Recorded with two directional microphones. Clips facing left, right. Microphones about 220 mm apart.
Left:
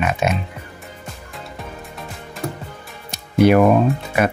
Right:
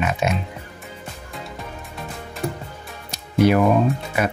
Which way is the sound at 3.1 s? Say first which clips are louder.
Left 3 dB; 60° left (ahead or behind).